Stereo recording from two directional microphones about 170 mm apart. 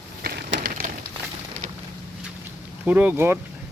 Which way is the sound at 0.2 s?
65° right (ahead or behind).